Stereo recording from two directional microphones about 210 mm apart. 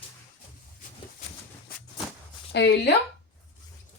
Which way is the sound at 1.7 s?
45° left (ahead or behind).